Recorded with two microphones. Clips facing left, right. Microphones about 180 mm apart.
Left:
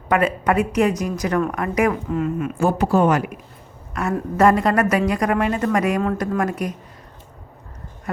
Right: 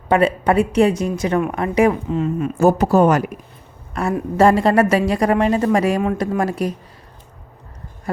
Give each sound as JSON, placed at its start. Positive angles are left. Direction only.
{"t": 0.1, "sound": "speech", "side_deg": -30}
{"t": 2.6, "sound": "speech", "side_deg": -40}